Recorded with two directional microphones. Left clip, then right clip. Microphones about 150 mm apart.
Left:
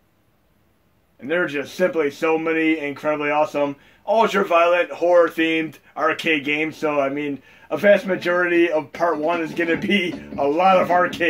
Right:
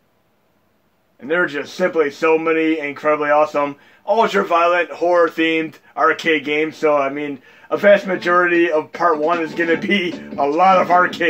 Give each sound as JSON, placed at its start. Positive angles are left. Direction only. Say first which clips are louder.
{"t": 1.2, "sound": "a man's voice", "louder": "right 3 dB", "side_deg": -45}